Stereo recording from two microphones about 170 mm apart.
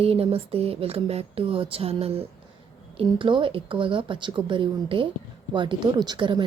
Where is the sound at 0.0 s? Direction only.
35° right (ahead or behind).